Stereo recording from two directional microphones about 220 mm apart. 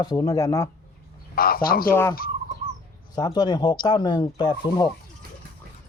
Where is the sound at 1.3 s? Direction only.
40° left (ahead or behind).